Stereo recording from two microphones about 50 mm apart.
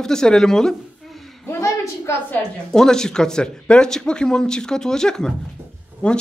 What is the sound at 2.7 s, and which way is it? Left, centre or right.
Speech, centre.